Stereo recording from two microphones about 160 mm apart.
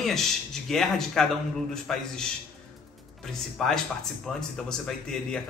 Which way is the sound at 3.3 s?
5° left (ahead or behind).